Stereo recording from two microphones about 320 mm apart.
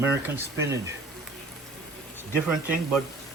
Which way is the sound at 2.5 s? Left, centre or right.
Centre.